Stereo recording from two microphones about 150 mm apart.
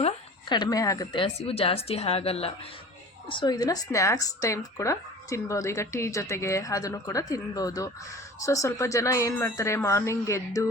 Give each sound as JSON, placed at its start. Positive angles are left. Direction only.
{"t": 0.4, "sound": "a woman's voice", "side_deg": 30}
{"t": 3.2, "sound": "speech", "side_deg": 30}